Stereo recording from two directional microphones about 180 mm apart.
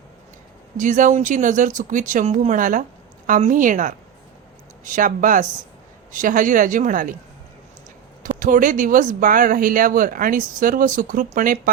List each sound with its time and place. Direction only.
0.8 s speech: 45° right (ahead or behind)
8.2 s speech: 50° right (ahead or behind)